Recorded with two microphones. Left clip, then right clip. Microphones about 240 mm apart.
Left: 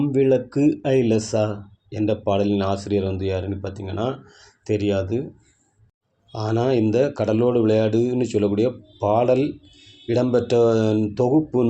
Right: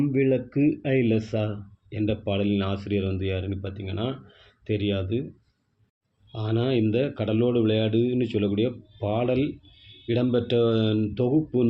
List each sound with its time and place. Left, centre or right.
0.1 s speech: centre
6.3 s speech: centre